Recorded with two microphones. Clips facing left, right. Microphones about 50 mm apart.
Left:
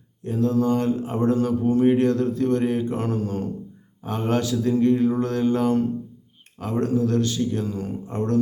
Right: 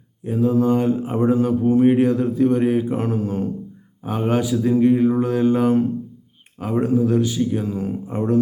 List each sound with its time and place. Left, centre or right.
0.3 s speech: centre